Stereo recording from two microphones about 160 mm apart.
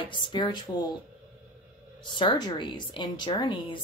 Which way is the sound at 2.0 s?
30° left (ahead or behind).